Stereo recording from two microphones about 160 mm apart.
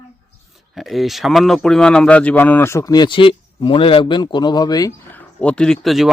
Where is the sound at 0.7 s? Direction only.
Centre (ahead or behind); by 4.9 s 25° left (ahead or behind).